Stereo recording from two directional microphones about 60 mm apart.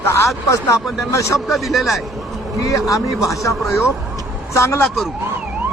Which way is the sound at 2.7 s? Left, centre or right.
Left.